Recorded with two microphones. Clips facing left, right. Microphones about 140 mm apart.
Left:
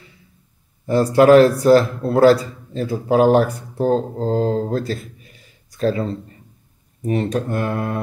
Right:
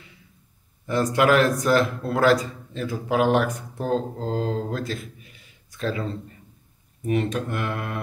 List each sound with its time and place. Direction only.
0.8 s a man's voice: 35° left (ahead or behind)